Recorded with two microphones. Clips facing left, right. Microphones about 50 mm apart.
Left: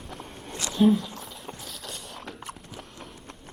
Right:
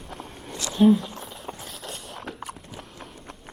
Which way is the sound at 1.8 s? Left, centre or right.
Right.